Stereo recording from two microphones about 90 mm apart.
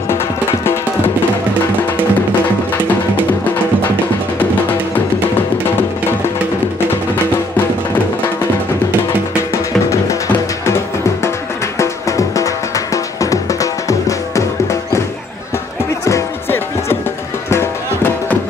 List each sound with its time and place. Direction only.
4.4 s music: 20° left (ahead or behind)
9.5 s music: 35° left (ahead or behind)
11.8 s music: 35° left (ahead or behind)
16.1 s music: 30° left (ahead or behind)